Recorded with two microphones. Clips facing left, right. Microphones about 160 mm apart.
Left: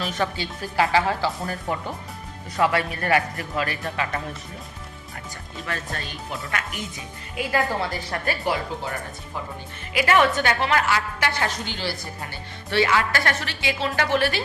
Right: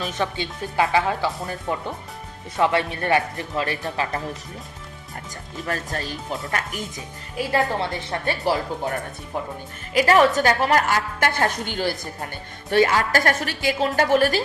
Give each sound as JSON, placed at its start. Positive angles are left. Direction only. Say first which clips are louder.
{"t": 0.0, "sound": "speech", "louder": "even", "side_deg": -20}
{"t": 2.6, "sound": "speech", "louder": "right 1 dB", "side_deg": -25}
{"t": 5.6, "sound": "speech", "louder": "right 4 dB", "side_deg": -40}
{"t": 7.3, "sound": "speech", "louder": "right 2 dB", "side_deg": -25}
{"t": 9.9, "sound": "a woman's voice", "louder": "right 3 dB", "side_deg": -40}